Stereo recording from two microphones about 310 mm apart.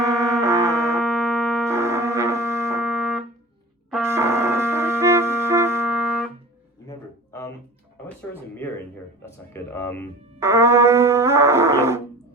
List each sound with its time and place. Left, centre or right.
0.0 s music: centre
1.0 s music: centre
1.6 s music: centre
3.9 s brass instrument: centre
9.2 s music: centre
10.4 s music: centre